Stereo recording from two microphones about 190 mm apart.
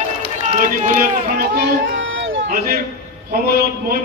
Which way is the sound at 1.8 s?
80° right.